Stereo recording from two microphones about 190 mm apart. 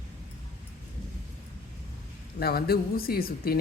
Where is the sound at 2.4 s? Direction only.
55° left (ahead or behind).